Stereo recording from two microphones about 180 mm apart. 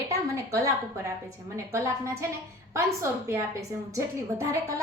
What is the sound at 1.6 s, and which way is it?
A woman's voice, 15° right (ahead or behind).